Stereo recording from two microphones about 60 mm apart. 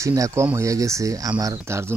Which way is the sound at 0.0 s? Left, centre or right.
Right.